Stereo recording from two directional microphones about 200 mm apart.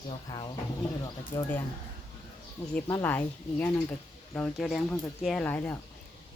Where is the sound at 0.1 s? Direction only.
20° left (ahead or behind).